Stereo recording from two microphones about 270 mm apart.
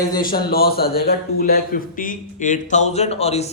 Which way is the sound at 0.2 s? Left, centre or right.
Left.